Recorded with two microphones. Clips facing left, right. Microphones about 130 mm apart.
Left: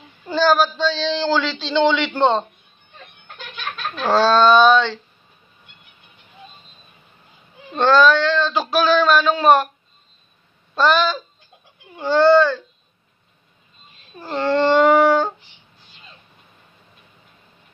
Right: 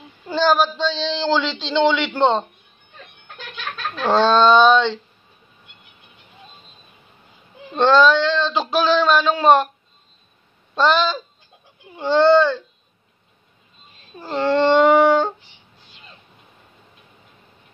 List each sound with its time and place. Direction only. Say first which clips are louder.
0.3 s child singing: left 1 dB; 20° right (ahead or behind)
4.1 s child singing: even; 20° right (ahead or behind)
7.7 s child singing: even; 20° right (ahead or behind)
10.8 s child singing: even; 20° right (ahead or behind)
14.2 s child singing: right 1 dB; 15° right (ahead or behind)